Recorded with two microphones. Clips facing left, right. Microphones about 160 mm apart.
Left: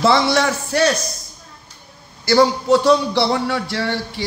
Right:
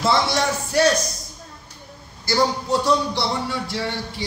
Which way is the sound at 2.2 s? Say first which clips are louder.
Left 7 dB; 75° left (ahead or behind).